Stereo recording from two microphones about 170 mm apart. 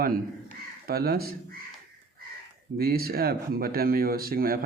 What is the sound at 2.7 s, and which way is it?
Speech, 65° right (ahead or behind).